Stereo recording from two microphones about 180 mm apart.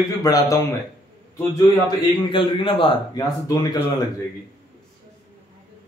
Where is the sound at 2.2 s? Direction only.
25° left (ahead or behind).